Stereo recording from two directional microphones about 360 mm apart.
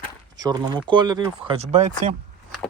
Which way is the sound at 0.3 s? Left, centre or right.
Centre.